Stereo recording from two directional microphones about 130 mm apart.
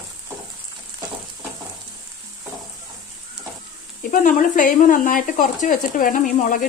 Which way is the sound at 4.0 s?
90° left.